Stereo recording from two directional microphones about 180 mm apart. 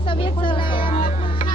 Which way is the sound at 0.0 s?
30° left (ahead or behind).